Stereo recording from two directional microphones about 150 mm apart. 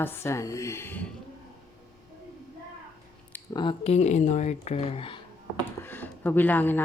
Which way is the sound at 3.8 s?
50° left (ahead or behind).